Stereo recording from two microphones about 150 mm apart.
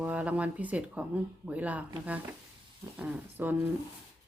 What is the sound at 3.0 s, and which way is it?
Speech, 15° right (ahead or behind).